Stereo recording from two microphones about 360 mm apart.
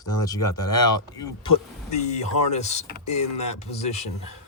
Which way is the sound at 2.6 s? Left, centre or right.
Centre.